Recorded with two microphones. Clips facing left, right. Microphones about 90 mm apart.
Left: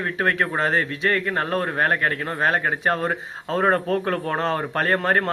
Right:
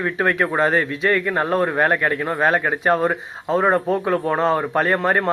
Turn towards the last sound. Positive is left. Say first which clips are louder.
# right 2 dB
turn(degrees=-30)  # may be behind; listen again after turning